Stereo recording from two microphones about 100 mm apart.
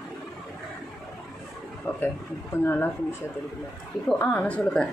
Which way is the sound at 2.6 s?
20° left (ahead or behind).